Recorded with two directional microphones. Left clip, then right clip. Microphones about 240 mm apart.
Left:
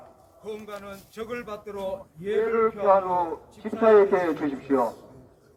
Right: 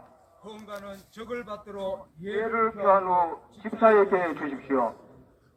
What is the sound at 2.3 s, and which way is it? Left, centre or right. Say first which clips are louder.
A man's voice: left 3 dB; right.